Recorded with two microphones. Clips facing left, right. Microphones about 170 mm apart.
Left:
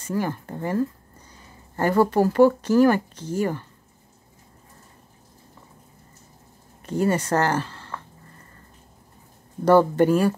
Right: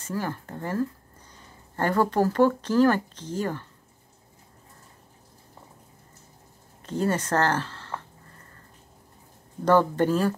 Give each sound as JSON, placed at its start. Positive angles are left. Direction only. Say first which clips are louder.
{"t": 0.1, "sound": "speech", "louder": "left 4 dB", "side_deg": 15}
{"t": 6.9, "sound": "speech", "louder": "left 3 dB", "side_deg": 10}
{"t": 9.7, "sound": "speech", "louder": "left 4 dB", "side_deg": 10}